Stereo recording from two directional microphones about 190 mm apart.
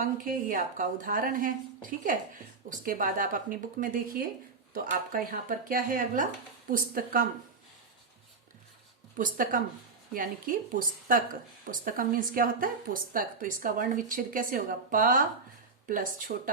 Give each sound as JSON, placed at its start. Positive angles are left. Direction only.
{"t": 0.0, "sound": "a woman's voice", "side_deg": -45}
{"t": 9.1, "sound": "a woman's voice", "side_deg": -45}